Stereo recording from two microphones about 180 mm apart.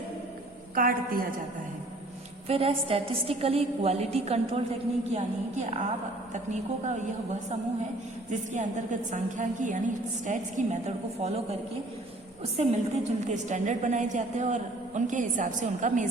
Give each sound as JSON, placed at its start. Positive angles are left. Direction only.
{"t": 0.8, "sound": "a woman's voice", "side_deg": -50}
{"t": 2.5, "sound": "a woman's voice", "side_deg": -30}
{"t": 8.3, "sound": "a woman's voice", "side_deg": -40}
{"t": 12.5, "sound": "a woman's voice", "side_deg": -35}